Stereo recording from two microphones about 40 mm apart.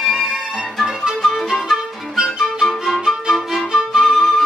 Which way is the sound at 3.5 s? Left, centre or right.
Centre.